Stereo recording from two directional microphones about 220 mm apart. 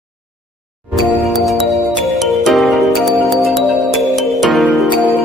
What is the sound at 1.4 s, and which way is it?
Music, centre (ahead or behind).